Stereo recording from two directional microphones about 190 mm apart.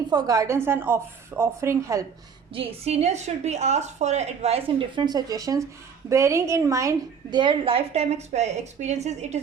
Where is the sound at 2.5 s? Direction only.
35° right (ahead or behind).